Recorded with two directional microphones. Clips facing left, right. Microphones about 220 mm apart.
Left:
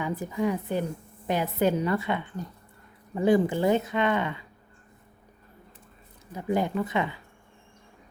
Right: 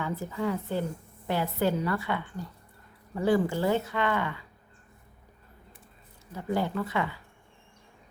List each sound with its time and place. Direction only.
0.0 s a woman's voice: 15° left (ahead or behind)
6.3 s speech: 15° left (ahead or behind)